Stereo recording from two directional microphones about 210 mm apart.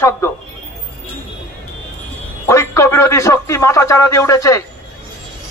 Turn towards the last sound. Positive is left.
turn(degrees=15)  # may be behind; listen again after turning